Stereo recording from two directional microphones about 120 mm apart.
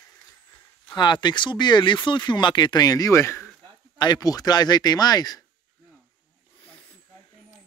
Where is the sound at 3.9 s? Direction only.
35° left (ahead or behind).